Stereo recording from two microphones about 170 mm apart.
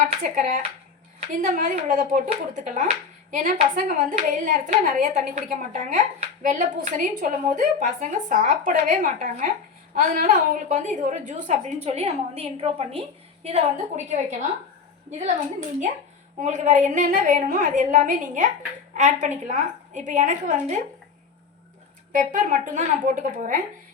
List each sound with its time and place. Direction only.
0.2 s a woman's voice: 50° right (ahead or behind)
16.4 s a woman's voice: 45° right (ahead or behind)
22.1 s a woman's voice: 50° right (ahead or behind)